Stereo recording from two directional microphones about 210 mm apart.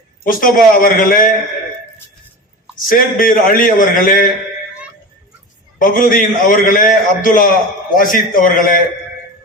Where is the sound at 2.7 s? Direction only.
40° left (ahead or behind).